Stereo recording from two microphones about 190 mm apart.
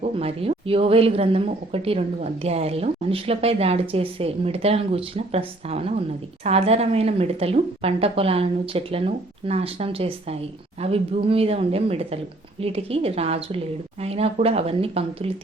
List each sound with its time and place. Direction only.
0.0 s speech: 30° right (ahead or behind)